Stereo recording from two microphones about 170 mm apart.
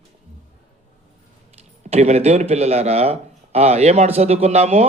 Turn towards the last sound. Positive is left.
turn(degrees=-40)  # may be behind; listen again after turning